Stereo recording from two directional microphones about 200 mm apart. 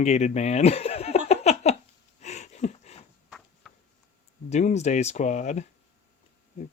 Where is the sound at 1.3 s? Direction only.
35° left (ahead or behind).